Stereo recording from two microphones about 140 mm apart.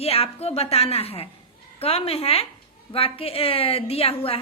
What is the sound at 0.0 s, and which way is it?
A woman's voice, 45° left (ahead or behind).